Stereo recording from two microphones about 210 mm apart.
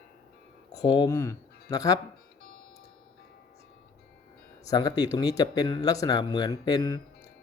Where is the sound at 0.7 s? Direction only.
20° left (ahead or behind).